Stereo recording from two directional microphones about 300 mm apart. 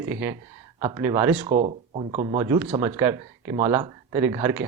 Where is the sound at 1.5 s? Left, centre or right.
Right.